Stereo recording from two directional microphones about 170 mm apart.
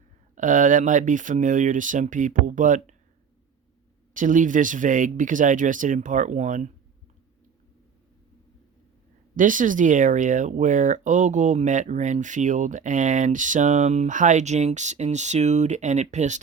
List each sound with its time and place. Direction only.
0.3 s speech: 50° right (ahead or behind)
4.1 s speech: 50° right (ahead or behind)
9.3 s speech: 50° right (ahead or behind)